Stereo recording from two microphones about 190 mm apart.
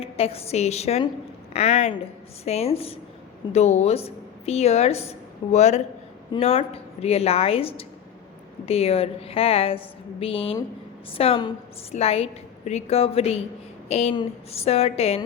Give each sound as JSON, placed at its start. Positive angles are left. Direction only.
{"t": 0.0, "sound": "a woman's voice", "side_deg": 30}